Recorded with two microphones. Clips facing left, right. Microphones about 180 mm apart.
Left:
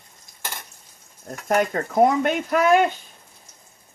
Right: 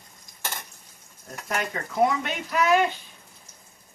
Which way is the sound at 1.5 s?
50° left (ahead or behind).